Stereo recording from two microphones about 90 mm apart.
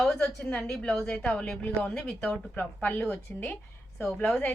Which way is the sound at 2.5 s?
20° left (ahead or behind).